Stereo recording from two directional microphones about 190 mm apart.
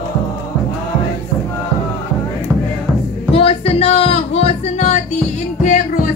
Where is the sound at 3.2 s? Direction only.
30° left (ahead or behind).